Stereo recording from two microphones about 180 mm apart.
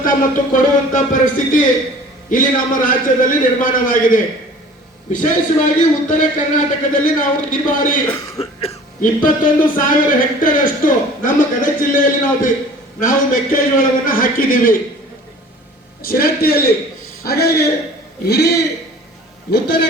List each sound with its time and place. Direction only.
0.0 s speech: 50° left (ahead or behind)
8.0 s speech: 35° left (ahead or behind)
9.0 s speech: 50° left (ahead or behind)
16.0 s a man's voice: 55° left (ahead or behind)